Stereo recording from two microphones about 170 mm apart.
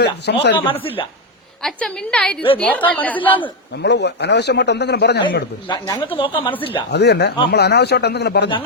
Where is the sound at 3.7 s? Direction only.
85° left.